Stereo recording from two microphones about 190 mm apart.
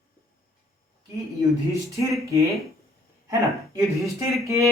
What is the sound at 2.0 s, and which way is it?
Speech, 15° right (ahead or behind).